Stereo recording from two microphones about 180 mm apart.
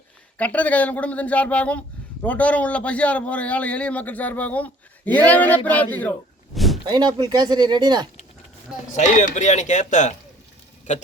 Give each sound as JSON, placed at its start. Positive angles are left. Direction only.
{"t": 0.3, "sound": "a man's voice", "side_deg": 10}
{"t": 6.8, "sound": "speech", "side_deg": -25}
{"t": 8.9, "sound": "speech", "side_deg": 45}